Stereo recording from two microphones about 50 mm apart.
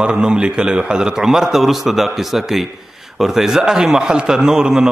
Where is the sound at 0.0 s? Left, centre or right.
Centre.